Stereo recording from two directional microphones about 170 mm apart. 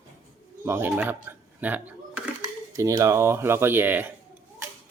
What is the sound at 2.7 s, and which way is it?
Speech, 20° right (ahead or behind).